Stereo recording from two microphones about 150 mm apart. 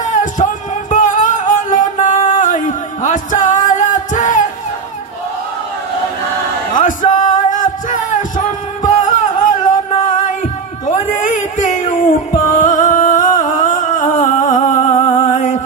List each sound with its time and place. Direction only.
0.0 s music: 55° left (ahead or behind)
6.7 s music: 60° left (ahead or behind)
10.9 s a sound: 55° left (ahead or behind)
12.5 s music: 55° left (ahead or behind)
15.0 s a sound: 30° left (ahead or behind)
15.3 s music: 55° left (ahead or behind)